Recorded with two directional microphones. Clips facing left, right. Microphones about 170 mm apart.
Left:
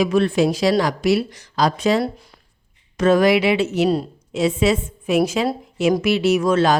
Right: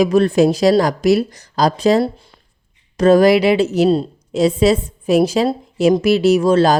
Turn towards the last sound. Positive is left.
turn(degrees=-35)  # may be behind; listen again after turning